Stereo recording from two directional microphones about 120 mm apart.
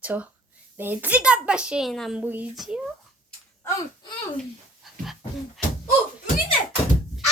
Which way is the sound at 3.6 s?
30° left (ahead or behind).